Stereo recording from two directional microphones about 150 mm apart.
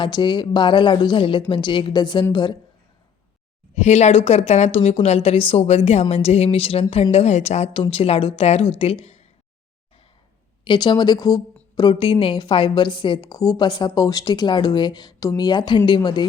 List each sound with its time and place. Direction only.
0.0 s a woman's voice: 30° left (ahead or behind)
3.8 s a woman's voice: 50° left (ahead or behind)
10.6 s a woman's voice: 30° left (ahead or behind)